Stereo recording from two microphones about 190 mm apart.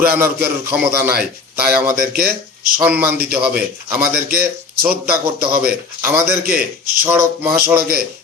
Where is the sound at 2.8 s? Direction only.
10° right (ahead or behind).